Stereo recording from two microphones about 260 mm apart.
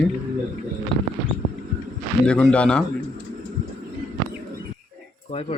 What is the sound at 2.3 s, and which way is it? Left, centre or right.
Speech, centre.